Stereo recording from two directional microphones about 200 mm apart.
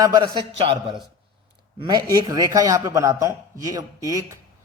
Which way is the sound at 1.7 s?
20° right (ahead or behind).